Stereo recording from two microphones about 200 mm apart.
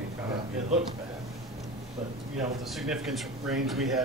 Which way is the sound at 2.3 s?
Centre (ahead or behind).